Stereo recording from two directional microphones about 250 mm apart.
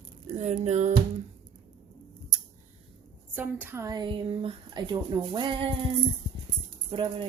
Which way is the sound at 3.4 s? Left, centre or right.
Centre.